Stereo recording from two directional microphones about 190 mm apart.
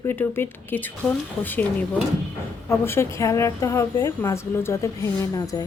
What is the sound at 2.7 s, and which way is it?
A woman's voice, 15° left (ahead or behind).